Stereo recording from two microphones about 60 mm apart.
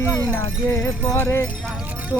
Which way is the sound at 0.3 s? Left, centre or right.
Left.